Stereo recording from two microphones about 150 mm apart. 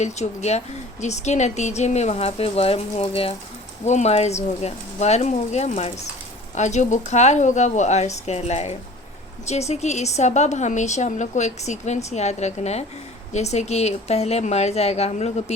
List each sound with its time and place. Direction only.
0.0 s a woman's voice: 50° left (ahead or behind)